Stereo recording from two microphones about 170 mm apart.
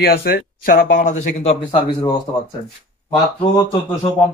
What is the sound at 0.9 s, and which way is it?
Speech, 45° left (ahead or behind).